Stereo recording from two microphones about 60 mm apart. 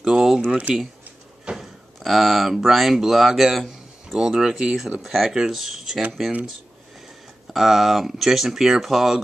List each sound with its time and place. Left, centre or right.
0.0 s a sound: centre
0.5 s speech: right
1.6 s speech: centre
7.5 s speech: centre